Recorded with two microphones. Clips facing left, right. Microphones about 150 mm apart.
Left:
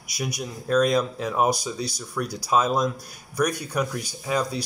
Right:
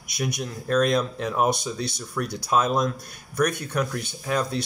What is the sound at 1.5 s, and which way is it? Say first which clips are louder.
Speech: even; 60° right (ahead or behind).